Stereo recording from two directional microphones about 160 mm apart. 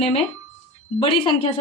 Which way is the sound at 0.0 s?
35° left (ahead or behind).